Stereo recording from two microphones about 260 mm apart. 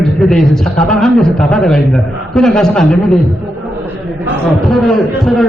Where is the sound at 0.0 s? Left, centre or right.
Centre.